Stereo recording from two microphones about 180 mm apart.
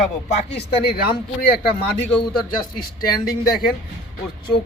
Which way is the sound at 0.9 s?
60° left (ahead or behind).